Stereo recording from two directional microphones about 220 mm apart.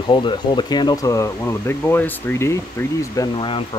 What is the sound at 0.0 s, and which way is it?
Speech, 20° left (ahead or behind).